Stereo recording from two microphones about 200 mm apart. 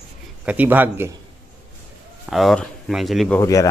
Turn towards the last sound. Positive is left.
turn(degrees=15)  # may be behind; listen again after turning